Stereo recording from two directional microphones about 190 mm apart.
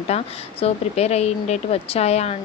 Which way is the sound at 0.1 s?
35° left (ahead or behind).